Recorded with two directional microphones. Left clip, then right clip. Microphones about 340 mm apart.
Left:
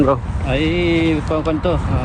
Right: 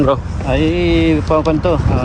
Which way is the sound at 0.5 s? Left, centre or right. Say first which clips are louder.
Right 3 dB; centre.